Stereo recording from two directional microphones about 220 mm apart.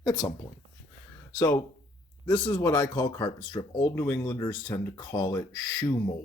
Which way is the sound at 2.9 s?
20° left (ahead or behind).